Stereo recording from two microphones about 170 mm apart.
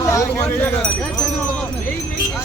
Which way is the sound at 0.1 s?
15° left (ahead or behind).